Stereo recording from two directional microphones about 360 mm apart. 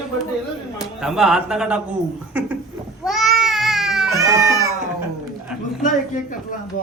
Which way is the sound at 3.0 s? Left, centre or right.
Centre.